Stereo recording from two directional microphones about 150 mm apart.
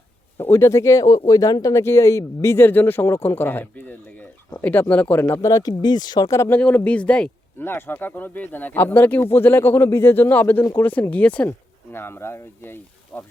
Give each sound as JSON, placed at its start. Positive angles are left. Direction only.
{"t": 0.3, "sound": "speech", "side_deg": 15}